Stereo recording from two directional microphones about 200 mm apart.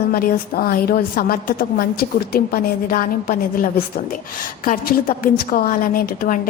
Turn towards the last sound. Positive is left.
turn(degrees=45)  # may be behind; listen again after turning